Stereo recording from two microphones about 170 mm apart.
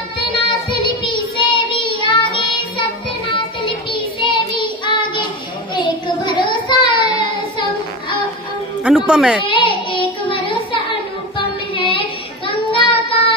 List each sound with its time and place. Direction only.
0.5 s child singing: 30° left (ahead or behind)
3.9 s child singing: 30° left (ahead or behind)
8.8 s speech: 5° right (ahead or behind)
9.5 s child singing: 30° left (ahead or behind)